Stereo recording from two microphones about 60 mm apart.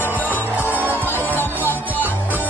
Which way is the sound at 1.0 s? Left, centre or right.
Left.